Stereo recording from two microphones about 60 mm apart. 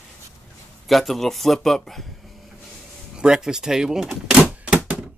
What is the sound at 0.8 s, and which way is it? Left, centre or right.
Speech, centre.